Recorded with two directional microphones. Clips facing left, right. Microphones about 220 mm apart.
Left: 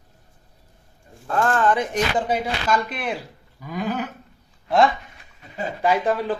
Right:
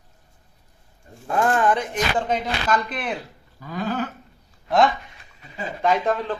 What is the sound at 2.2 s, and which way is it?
Speech, 10° left (ahead or behind).